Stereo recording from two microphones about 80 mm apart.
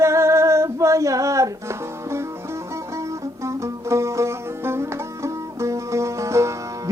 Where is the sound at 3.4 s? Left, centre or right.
Right.